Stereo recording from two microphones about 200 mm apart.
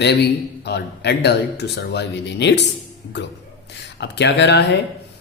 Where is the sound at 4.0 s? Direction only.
60° left (ahead or behind).